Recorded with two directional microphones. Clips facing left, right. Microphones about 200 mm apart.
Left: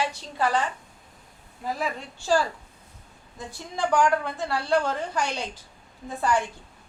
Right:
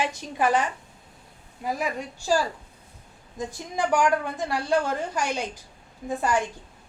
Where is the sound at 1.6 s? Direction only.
15° right (ahead or behind).